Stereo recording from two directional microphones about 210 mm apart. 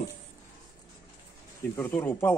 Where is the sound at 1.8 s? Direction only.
10° left (ahead or behind).